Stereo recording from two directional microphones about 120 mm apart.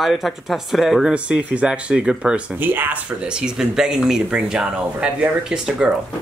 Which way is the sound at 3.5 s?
5° right (ahead or behind).